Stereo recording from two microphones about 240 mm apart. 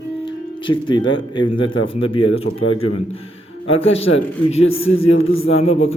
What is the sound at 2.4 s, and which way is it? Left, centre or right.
Speech, left.